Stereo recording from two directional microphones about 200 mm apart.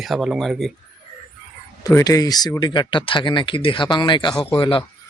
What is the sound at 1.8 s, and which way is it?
Speech, 15° left (ahead or behind).